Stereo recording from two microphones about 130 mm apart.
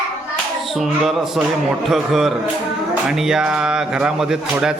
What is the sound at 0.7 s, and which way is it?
A man's voice, centre (ahead or behind).